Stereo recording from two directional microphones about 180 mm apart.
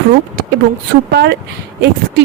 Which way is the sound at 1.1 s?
65° right (ahead or behind).